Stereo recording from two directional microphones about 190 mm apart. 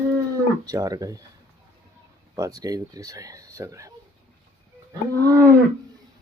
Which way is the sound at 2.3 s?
15° right (ahead or behind).